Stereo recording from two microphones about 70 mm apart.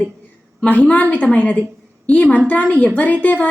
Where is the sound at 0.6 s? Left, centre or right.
Left.